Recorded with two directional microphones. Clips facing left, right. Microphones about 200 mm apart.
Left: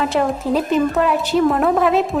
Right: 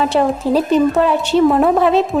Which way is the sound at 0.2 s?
30° right (ahead or behind).